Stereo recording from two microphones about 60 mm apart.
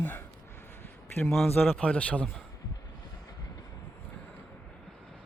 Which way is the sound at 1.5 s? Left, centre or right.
Left.